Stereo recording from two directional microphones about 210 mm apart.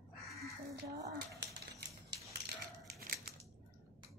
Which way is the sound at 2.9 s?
45° right (ahead or behind).